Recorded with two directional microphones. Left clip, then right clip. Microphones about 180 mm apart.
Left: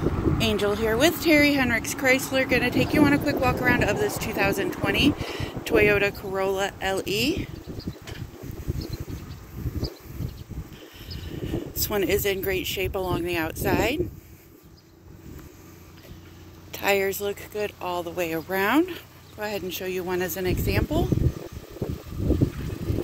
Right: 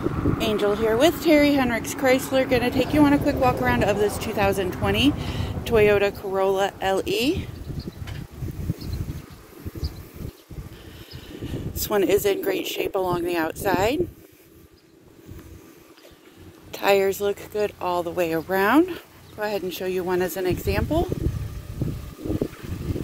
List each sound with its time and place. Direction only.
0.4 s speech: 5° right (ahead or behind); by 7.4 s 40° right (ahead or behind)
11.4 s speech: 40° right (ahead or behind)
16.7 s speech: 45° right (ahead or behind)